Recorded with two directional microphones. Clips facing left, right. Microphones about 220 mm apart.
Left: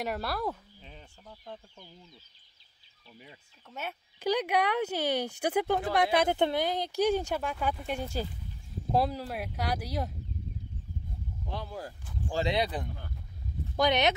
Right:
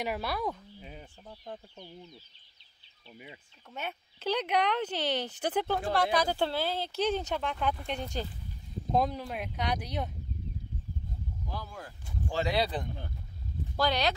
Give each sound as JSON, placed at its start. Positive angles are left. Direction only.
{"t": 0.0, "sound": "speech", "side_deg": 0}
{"t": 0.7, "sound": "fowl", "side_deg": -10}
{"t": 3.7, "sound": "speech", "side_deg": 10}
{"t": 5.8, "sound": "speech", "side_deg": 20}
{"t": 11.5, "sound": "speech", "side_deg": 25}